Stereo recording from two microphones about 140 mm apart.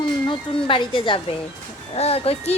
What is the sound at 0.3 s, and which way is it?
Speech, 35° left (ahead or behind).